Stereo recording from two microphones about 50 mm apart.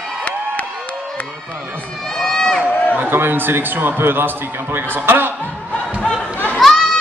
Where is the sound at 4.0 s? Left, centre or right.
Right.